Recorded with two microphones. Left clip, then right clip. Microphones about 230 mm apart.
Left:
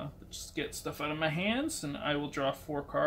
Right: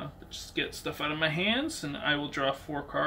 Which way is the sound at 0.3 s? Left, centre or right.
Left.